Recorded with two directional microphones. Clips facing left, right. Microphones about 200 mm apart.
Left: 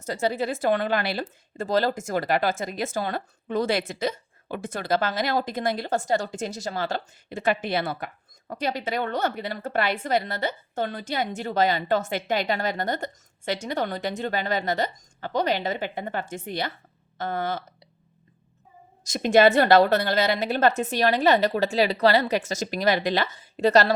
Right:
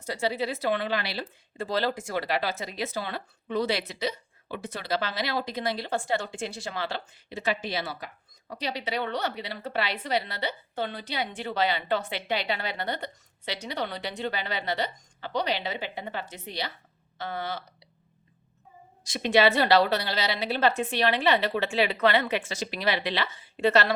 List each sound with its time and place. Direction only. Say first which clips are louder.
0.0 s speech: left 3 dB; 45° left (ahead or behind)
19.0 s speech: left 4 dB; 45° left (ahead or behind)